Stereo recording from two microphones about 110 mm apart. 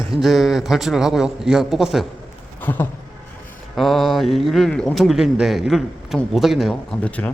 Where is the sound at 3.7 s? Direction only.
Centre (ahead or behind).